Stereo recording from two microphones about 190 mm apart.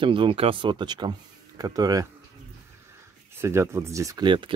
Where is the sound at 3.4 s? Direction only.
15° right (ahead or behind).